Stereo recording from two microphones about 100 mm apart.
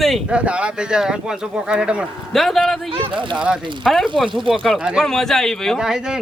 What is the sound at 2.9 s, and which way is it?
Speech, 55° right (ahead or behind).